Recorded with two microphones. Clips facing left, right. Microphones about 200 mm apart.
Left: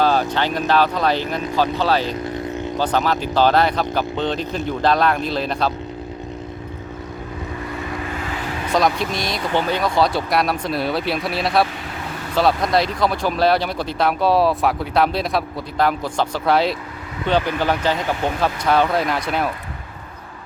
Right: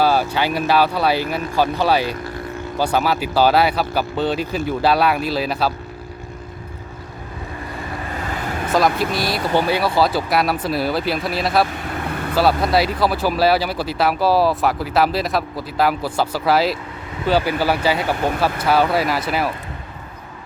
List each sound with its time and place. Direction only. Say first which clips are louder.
0.0 s speech: right 1 dB; 10° right (ahead or behind)
8.2 s vehicle: right 1 dB; 45° right (ahead or behind)
8.7 s speech: right 1 dB; 5° right (ahead or behind)